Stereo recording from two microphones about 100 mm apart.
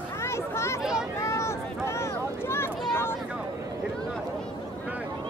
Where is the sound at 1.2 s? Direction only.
30° left (ahead or behind).